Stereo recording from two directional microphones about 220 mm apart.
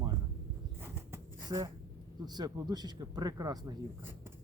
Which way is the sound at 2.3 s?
20° right (ahead or behind).